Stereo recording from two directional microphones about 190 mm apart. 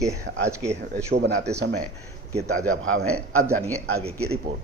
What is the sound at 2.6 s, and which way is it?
Speech, 90° right.